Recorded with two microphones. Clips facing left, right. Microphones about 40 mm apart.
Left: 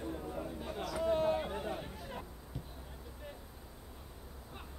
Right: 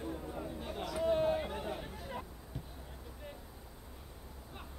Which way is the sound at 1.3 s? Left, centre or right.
Centre.